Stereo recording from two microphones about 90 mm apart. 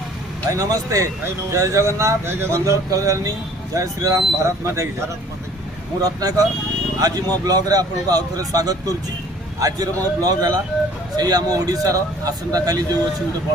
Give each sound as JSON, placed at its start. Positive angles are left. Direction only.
{"t": 0.5, "sound": "speech", "side_deg": -40}
{"t": 6.0, "sound": "speech", "side_deg": -45}